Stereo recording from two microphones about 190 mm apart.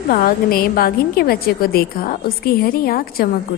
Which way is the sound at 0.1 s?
50° left (ahead or behind).